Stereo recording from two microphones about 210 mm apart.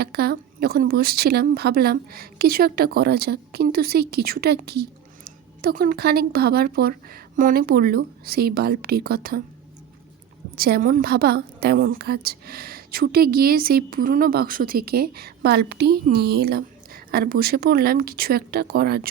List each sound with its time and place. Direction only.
0.0 s speech: 50° right (ahead or behind)
10.5 s speech: 45° right (ahead or behind)